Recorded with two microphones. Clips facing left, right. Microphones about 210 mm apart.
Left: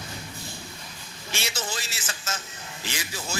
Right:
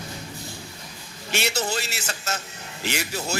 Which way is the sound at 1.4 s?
65° right (ahead or behind).